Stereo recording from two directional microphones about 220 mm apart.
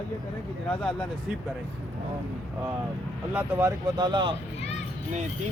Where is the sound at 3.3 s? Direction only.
15° right (ahead or behind).